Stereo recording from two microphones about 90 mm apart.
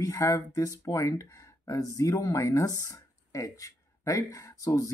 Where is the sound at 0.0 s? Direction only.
35° left (ahead or behind).